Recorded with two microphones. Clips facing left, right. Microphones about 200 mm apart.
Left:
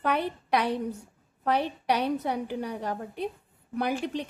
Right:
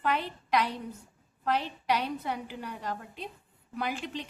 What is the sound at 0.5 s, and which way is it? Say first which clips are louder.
A woman's voice: left 3 dB; 60° left (ahead or behind).